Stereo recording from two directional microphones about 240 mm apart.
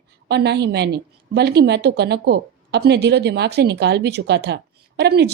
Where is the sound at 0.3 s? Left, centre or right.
Right.